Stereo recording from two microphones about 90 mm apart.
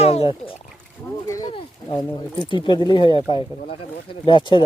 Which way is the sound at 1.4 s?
70° left (ahead or behind).